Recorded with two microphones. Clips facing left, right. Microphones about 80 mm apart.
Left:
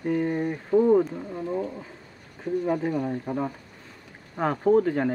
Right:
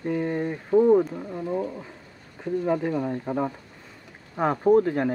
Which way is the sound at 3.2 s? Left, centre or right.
Centre.